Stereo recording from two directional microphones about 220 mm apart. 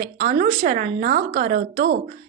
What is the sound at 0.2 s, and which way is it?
A woman's voice, 40° right (ahead or behind).